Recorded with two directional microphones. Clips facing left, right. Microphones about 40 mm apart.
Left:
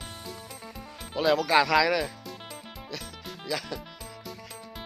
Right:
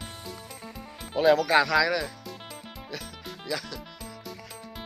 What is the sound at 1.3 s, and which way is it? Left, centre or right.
Speech, centre.